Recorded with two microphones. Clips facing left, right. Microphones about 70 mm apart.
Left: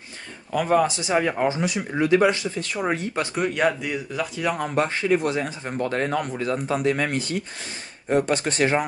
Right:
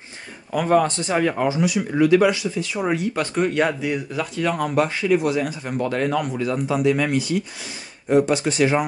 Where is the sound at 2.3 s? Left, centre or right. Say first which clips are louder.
Right 3 dB; left.